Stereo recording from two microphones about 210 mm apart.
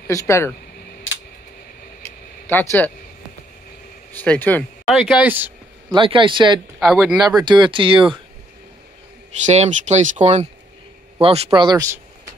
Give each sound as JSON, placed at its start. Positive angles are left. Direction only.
{"t": 0.1, "sound": "speech", "side_deg": 15}
{"t": 2.4, "sound": "a man's voice", "side_deg": 10}
{"t": 4.1, "sound": "speech", "side_deg": 10}
{"t": 5.9, "sound": "a man's voice", "side_deg": -25}
{"t": 6.8, "sound": "speech", "side_deg": -5}
{"t": 7.4, "sound": "a man's voice", "side_deg": -20}
{"t": 9.5, "sound": "a man's voice", "side_deg": -30}